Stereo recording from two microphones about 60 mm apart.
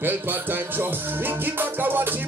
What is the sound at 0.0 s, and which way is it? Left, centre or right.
Music, right.